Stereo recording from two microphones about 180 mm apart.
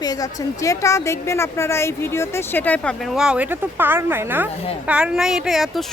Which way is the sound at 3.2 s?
5° right (ahead or behind).